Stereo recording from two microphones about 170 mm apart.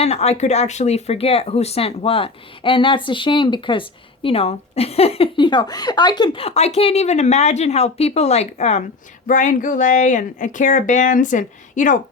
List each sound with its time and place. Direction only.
0.0 s speech: 40° left (ahead or behind)